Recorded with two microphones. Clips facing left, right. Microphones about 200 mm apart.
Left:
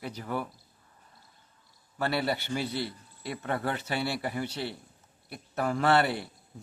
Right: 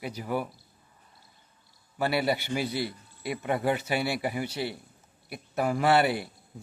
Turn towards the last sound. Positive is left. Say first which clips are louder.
# right 2 dB
turn(degrees=-10)  # may be behind; listen again after turning